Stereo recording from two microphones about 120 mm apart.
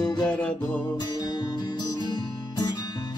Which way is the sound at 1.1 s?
35° left (ahead or behind).